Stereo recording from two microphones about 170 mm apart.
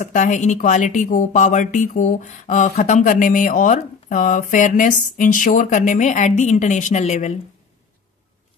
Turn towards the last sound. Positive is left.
turn(degrees=40)  # may be behind; listen again after turning